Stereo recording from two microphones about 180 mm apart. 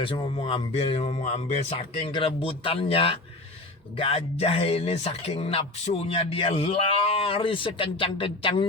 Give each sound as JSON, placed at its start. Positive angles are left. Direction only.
{"t": 0.0, "sound": "speech", "side_deg": 30}